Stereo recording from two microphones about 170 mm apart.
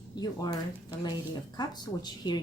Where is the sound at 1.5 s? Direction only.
25° left (ahead or behind).